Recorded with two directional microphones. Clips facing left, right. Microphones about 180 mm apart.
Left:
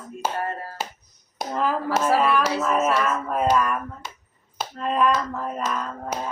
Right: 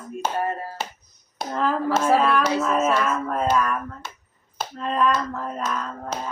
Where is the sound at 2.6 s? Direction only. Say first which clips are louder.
Even; 5° left (ahead or behind).